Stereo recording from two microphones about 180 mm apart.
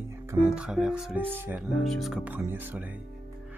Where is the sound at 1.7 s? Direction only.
Centre (ahead or behind).